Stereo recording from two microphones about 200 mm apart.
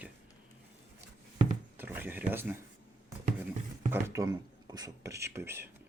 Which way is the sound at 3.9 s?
15° right (ahead or behind).